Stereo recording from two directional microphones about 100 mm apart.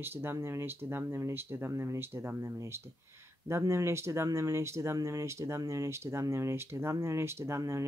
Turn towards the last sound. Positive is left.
turn(degrees=-30)  # may be behind; listen again after turning